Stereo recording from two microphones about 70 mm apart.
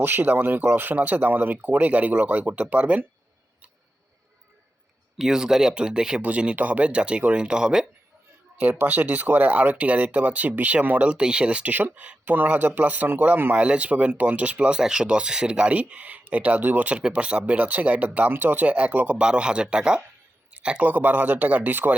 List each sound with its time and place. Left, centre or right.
0.0 s speech: right
5.1 s speech: centre
8.5 s speech: right
12.2 s speech: right